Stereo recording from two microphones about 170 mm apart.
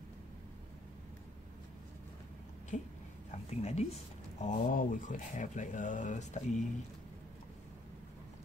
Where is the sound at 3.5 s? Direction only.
40° left (ahead or behind).